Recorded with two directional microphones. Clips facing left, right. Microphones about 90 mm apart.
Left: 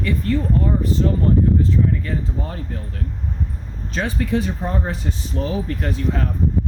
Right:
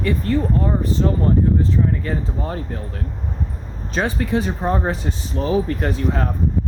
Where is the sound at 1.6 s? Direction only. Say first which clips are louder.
Even; 35° right (ahead or behind).